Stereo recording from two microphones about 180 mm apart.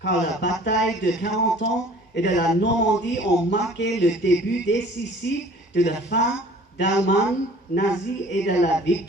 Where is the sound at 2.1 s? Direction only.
70° left (ahead or behind).